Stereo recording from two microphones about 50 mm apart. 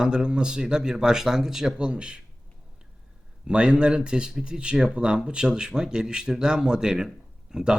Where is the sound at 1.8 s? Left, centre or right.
Centre.